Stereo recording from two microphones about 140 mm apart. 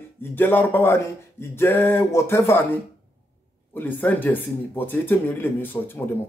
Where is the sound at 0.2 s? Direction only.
15° left (ahead or behind).